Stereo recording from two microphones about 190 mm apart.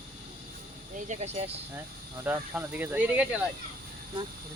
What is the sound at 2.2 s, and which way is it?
Speech, 10° right (ahead or behind).